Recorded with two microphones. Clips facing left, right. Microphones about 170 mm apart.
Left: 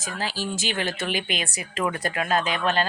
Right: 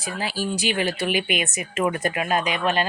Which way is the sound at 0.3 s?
10° right (ahead or behind).